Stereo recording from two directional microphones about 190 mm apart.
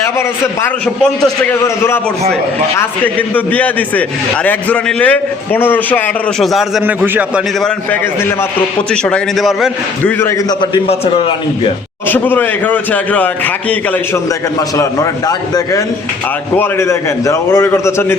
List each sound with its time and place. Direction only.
0.2 s a man's voice: 10° left (ahead or behind)
6.4 s a man's voice: centre (ahead or behind)
7.9 s a man's voice: 10° left (ahead or behind)
10.0 s a man's voice: 10° left (ahead or behind)
10.6 s a man's voice: 30° left (ahead or behind)
12.0 s a man's voice: 10° left (ahead or behind)